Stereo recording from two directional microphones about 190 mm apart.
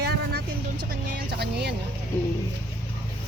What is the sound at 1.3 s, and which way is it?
Music, 60° right (ahead or behind).